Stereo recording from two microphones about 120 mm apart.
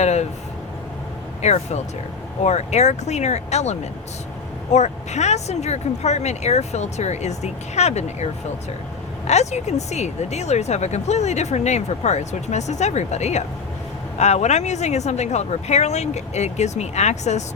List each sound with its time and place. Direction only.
0.0 s speech: 70° left (ahead or behind)
1.4 s speech: 65° left (ahead or behind)